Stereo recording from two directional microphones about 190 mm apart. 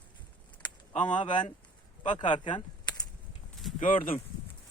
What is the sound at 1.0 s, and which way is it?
Speech, 25° left (ahead or behind).